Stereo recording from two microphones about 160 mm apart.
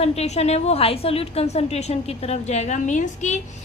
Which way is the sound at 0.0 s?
40° left (ahead or behind).